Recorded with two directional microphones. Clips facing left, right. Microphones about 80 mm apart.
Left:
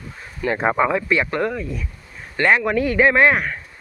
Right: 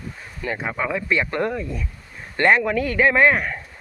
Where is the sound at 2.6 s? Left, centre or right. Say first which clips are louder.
Left 2 dB; centre.